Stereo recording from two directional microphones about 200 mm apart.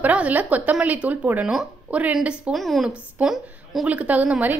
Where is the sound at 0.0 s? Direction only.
5° right (ahead or behind).